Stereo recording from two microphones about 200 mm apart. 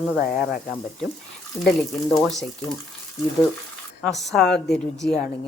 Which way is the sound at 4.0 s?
Centre (ahead or behind).